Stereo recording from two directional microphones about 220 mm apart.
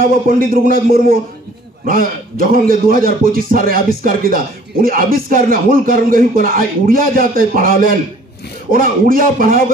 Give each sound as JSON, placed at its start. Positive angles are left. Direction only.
{"t": 0.3, "sound": "speech", "side_deg": -40}